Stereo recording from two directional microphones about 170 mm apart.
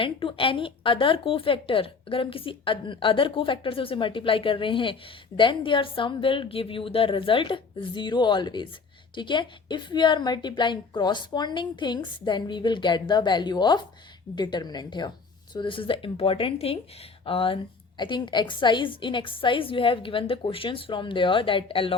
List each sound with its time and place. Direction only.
0.0 s a woman's voice: 30° left (ahead or behind)